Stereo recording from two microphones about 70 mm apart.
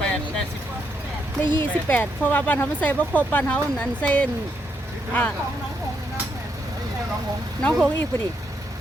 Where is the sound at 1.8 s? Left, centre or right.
Left.